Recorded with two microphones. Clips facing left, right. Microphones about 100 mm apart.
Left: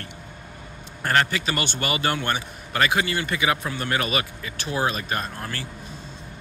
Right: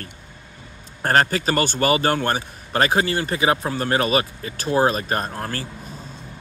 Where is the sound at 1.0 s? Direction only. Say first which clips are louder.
Right 4 dB; 40° right (ahead or behind).